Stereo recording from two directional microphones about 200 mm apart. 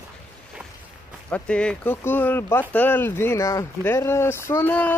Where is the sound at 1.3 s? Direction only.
5° left (ahead or behind).